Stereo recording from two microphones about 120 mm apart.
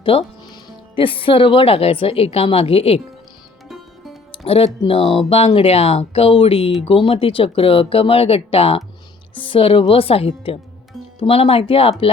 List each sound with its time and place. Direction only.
0.0 s speech: 50° left (ahead or behind)
3.7 s music: centre (ahead or behind)
4.3 s speech: 50° left (ahead or behind)